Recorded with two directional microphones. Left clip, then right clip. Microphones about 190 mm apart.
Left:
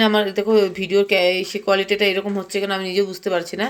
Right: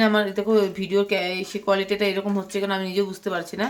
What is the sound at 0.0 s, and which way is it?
Speech, centre (ahead or behind).